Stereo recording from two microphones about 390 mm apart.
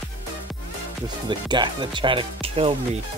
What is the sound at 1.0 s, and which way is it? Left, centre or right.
Speech, centre.